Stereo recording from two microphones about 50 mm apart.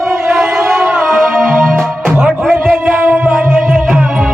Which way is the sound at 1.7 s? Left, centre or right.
Right.